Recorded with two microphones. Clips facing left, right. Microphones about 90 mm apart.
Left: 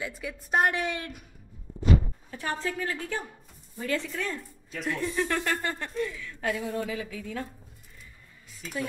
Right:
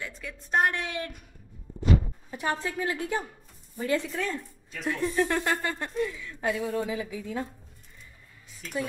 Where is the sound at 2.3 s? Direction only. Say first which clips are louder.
Right 2 dB; 15° right (ahead or behind).